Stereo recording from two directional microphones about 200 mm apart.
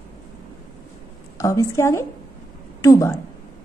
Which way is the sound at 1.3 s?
15° left (ahead or behind).